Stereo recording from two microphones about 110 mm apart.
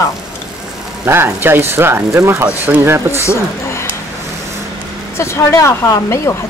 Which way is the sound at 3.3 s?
25° left (ahead or behind).